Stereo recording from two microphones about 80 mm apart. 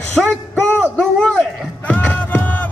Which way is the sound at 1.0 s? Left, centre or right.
Centre.